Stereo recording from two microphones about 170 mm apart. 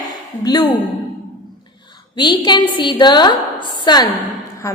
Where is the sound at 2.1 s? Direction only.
25° left (ahead or behind).